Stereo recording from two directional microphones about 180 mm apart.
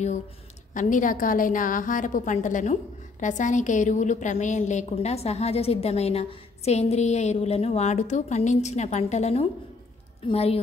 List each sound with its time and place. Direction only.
0.7 s a woman's voice: 45° left (ahead or behind)